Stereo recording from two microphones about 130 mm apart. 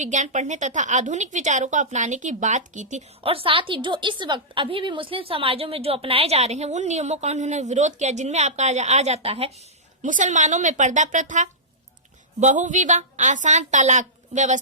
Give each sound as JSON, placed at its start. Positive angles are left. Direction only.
{"t": 0.0, "sound": "a woman's voice", "side_deg": -65}
{"t": 3.2, "sound": "a woman's voice", "side_deg": -45}
{"t": 10.0, "sound": "a woman's voice", "side_deg": -75}